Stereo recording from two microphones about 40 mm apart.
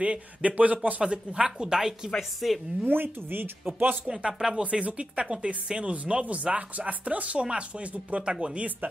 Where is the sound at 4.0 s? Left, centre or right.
Right.